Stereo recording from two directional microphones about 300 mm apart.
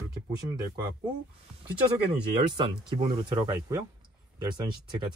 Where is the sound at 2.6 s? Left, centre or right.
Centre.